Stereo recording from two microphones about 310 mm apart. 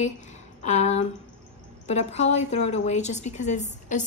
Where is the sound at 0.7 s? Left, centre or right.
Left.